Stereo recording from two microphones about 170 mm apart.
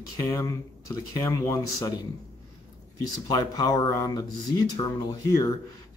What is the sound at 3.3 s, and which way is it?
Speech, 25° left (ahead or behind).